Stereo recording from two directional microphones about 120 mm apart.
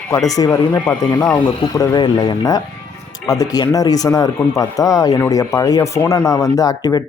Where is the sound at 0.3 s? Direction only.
30° left (ahead or behind).